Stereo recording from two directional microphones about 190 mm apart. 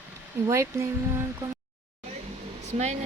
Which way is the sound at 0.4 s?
15° right (ahead or behind).